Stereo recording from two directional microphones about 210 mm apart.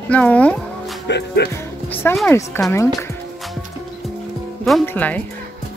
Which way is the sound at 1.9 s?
5° left (ahead or behind).